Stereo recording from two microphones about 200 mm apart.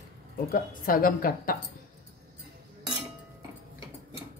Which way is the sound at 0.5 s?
45° left (ahead or behind).